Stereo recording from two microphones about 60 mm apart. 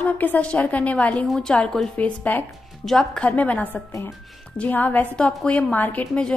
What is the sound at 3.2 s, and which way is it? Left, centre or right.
A woman's voice, left.